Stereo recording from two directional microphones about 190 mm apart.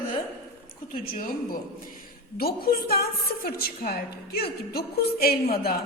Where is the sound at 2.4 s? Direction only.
55° left (ahead or behind).